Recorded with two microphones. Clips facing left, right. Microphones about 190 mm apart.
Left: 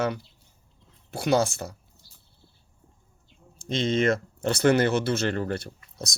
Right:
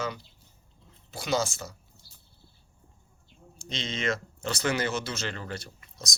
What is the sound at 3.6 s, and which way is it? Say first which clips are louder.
Speech: left 9 dB; 50° left (ahead or behind).